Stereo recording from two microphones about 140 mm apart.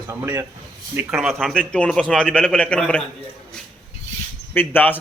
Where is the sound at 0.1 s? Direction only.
20° right (ahead or behind).